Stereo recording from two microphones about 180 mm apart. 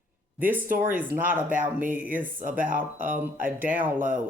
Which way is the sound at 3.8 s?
10° right (ahead or behind).